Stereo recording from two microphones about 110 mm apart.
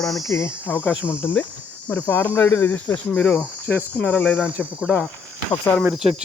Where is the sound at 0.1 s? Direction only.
30° left (ahead or behind).